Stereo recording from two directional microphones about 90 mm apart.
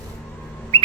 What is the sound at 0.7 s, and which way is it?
Whistle, 90° right.